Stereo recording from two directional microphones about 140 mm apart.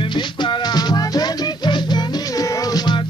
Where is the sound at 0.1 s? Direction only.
30° left (ahead or behind).